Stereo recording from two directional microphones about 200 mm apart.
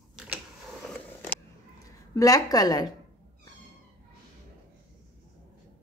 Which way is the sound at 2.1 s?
15° left (ahead or behind).